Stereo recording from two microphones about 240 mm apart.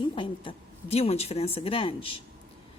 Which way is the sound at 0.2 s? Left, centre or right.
Left.